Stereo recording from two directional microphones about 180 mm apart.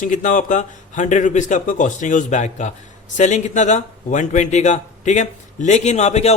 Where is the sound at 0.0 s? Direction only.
45° left (ahead or behind).